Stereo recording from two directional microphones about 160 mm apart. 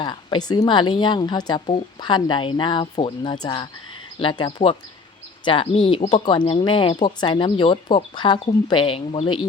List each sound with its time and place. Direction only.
0.0 s a woman's voice: 25° left (ahead or behind)
6.2 s speech: 30° left (ahead or behind)